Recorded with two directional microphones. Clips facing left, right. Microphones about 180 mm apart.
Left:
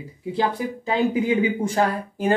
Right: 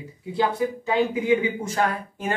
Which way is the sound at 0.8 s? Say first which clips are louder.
Left 3 dB; 30° left (ahead or behind).